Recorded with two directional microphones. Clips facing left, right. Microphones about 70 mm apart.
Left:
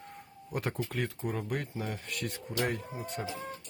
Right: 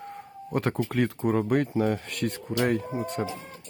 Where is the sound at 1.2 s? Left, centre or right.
Right.